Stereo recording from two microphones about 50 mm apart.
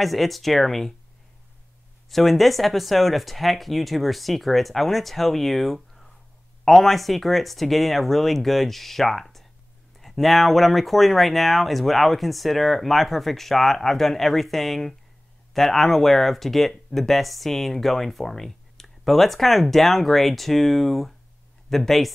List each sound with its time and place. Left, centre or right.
0.0 s speech: centre
2.0 s speech: centre